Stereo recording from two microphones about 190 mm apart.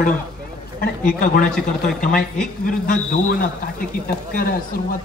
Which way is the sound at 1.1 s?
45° left (ahead or behind).